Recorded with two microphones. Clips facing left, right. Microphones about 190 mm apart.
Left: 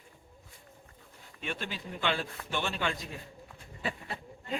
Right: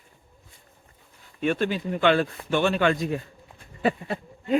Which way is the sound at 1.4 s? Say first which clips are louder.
Right 14 dB; 55° right (ahead or behind).